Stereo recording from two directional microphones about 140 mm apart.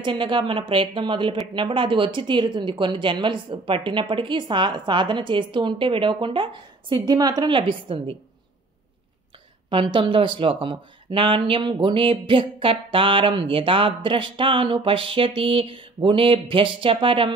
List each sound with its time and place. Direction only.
0.0 s speech: 35° right (ahead or behind)
9.7 s speech: 40° right (ahead or behind)